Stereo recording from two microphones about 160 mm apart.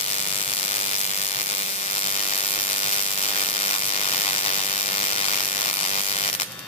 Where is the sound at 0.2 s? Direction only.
40° left (ahead or behind).